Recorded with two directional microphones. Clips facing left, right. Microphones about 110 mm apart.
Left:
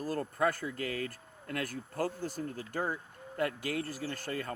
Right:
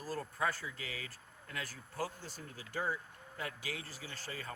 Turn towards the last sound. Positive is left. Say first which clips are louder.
# left 9 dB
turn(degrees=50)  # may be behind; listen again after turning